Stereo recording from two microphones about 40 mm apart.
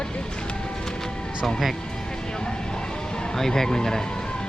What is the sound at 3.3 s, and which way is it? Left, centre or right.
Speech, centre.